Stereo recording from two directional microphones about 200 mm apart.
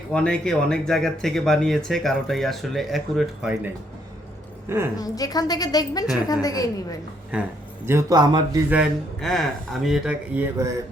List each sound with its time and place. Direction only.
0.1 s speech: 5° left (ahead or behind)
4.9 s a woman's voice: 20° left (ahead or behind)
7.3 s speech: 5° right (ahead or behind)
7.9 s speech: 15° right (ahead or behind)
8.7 s speech: centre (ahead or behind)